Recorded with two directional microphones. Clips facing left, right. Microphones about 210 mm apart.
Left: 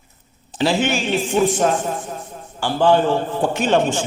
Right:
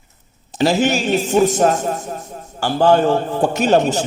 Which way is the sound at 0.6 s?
40° right (ahead or behind).